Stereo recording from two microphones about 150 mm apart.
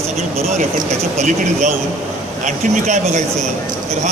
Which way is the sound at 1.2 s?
55° right (ahead or behind).